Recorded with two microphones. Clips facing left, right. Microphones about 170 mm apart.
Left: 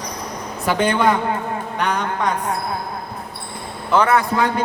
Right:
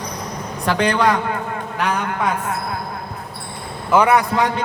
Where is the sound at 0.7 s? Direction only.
5° left (ahead or behind).